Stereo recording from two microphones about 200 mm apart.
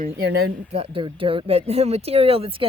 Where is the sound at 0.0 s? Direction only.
50° right (ahead or behind).